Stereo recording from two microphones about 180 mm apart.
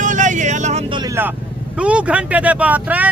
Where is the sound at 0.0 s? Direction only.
45° right (ahead or behind); by 1.1 s 25° right (ahead or behind).